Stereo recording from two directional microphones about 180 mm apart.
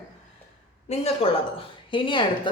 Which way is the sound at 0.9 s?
35° left (ahead or behind).